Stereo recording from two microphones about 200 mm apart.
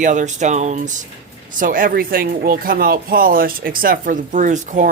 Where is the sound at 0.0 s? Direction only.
40° right (ahead or behind).